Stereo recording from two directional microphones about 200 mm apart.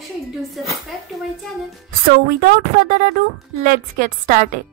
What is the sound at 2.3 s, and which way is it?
A woman's voice, 45° right (ahead or behind).